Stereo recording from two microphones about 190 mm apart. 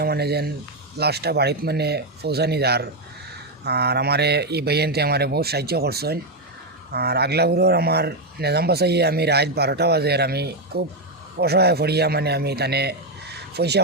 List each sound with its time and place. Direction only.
0.0 s speech: 55° right (ahead or behind)